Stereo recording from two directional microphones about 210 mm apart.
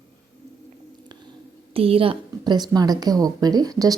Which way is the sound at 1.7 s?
25° right (ahead or behind).